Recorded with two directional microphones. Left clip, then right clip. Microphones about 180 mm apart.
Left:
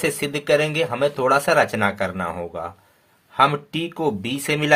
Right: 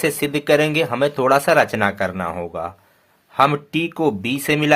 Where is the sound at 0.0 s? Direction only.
25° right (ahead or behind).